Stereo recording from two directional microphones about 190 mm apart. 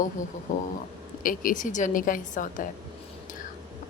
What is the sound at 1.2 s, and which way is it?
Speech, 45° left (ahead or behind).